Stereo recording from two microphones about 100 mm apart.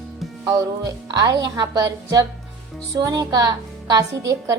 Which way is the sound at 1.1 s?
40° right (ahead or behind).